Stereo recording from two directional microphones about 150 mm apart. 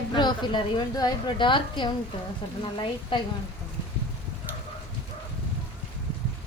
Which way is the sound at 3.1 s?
35° left (ahead or behind).